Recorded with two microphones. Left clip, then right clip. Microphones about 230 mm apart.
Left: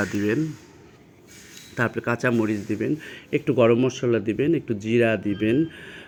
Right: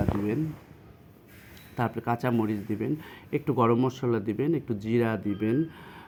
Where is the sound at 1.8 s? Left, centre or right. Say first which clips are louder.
Left 5 dB; centre.